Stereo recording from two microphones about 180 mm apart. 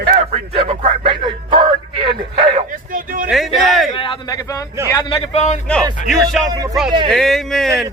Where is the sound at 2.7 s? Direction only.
50° right (ahead or behind).